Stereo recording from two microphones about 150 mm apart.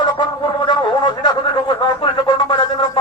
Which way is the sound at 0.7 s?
30° left (ahead or behind).